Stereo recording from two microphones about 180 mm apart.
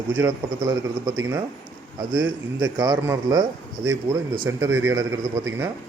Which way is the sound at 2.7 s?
20° right (ahead or behind).